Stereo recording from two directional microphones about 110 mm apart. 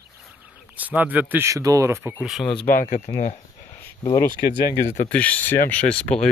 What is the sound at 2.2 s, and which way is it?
Speech, 5° right (ahead or behind).